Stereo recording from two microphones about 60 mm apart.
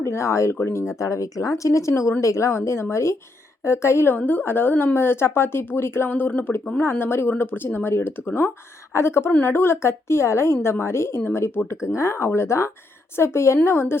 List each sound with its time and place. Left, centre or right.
0.0 s a woman's voice: left
4.3 s speech: left
6.1 s speech: left
8.9 s a woman's voice: left